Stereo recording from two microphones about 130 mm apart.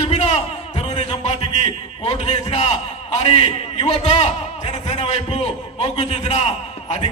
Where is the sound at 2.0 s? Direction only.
55° left (ahead or behind).